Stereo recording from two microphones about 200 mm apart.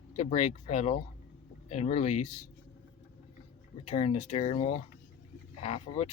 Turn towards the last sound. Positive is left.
turn(degrees=30)  # may be behind; listen again after turning